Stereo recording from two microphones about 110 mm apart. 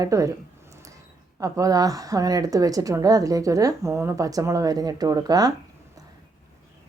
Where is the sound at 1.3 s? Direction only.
30° right (ahead or behind).